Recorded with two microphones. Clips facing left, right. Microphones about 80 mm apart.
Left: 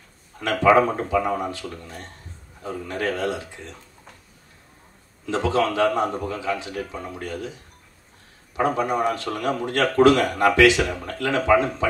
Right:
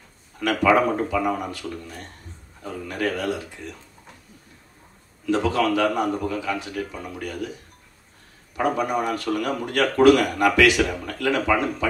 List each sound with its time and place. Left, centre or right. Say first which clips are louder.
0.4 s a man's voice: left 2 dB; left
5.2 s a man's voice: even; left
8.5 s a man's voice: left 1 dB; left